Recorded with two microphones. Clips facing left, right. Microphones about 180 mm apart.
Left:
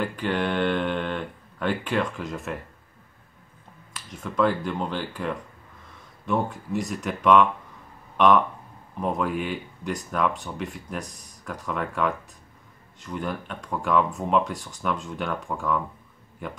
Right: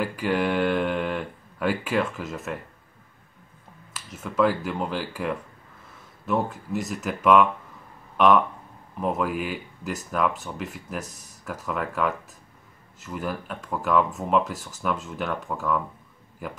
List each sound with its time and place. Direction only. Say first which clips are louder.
0.0 s speech: right 1 dB; 10° right (ahead or behind)
3.9 s speech: right 1 dB; 5° right (ahead or behind)